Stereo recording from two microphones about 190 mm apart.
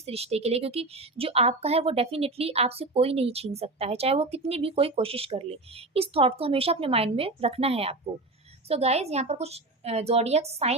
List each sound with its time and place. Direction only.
0.0 s speech: 30° right (ahead or behind)